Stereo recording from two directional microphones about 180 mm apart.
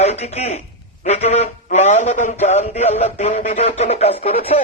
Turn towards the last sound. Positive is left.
turn(degrees=35)  # may be behind; listen again after turning